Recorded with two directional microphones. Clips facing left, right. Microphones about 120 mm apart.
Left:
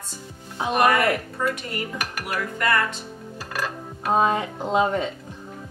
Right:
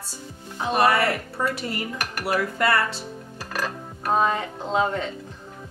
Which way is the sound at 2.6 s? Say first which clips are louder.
Left 1 dB; 30° right (ahead or behind).